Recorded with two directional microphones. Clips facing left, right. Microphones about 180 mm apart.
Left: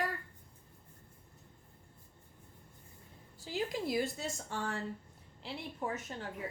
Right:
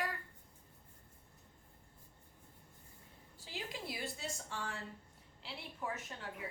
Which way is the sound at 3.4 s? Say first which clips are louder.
Left 9 dB; 45° left (ahead or behind).